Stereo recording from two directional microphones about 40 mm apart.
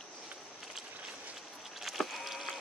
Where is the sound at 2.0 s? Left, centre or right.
Centre.